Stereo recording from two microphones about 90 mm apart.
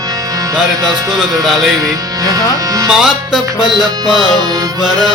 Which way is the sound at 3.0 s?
5° right (ahead or behind).